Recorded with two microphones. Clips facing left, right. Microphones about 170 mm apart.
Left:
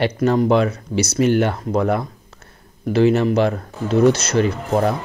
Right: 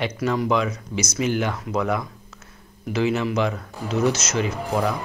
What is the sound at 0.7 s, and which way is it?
Speech, 65° left (ahead or behind).